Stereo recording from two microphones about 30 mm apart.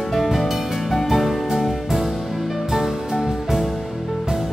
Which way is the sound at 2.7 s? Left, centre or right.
Centre.